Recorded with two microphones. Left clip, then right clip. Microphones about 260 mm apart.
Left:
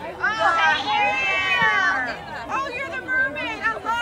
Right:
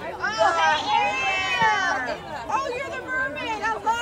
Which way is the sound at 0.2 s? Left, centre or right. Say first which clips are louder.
Left 2 dB; centre.